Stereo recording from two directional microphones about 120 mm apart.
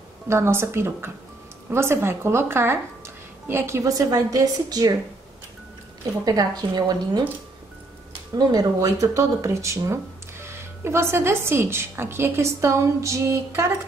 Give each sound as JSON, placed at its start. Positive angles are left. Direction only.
{"t": 0.3, "sound": "speech", "side_deg": -20}
{"t": 6.2, "sound": "a woman's voice", "side_deg": -35}
{"t": 8.4, "sound": "speech", "side_deg": -30}